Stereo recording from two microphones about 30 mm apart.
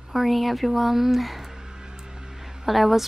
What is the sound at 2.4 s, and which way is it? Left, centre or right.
Speech, centre.